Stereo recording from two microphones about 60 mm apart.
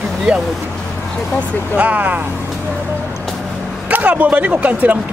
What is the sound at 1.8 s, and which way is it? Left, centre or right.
Speech, right.